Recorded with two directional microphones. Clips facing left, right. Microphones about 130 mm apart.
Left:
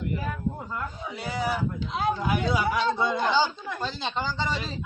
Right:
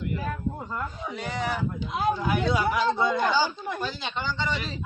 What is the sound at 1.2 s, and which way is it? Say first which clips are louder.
Speech: left 1 dB; 5° left (ahead or behind).